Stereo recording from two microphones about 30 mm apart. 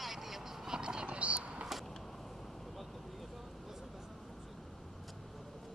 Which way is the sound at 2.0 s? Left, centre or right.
Centre.